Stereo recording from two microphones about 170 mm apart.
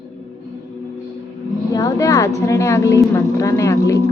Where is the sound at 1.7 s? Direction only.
20° left (ahead or behind).